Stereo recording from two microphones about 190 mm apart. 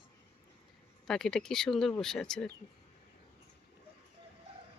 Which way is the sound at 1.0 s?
Centre (ahead or behind).